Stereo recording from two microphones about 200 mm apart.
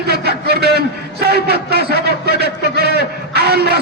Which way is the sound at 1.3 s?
55° right (ahead or behind).